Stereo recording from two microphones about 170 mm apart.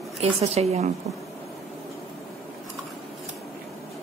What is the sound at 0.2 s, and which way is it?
Speech, 40° right (ahead or behind).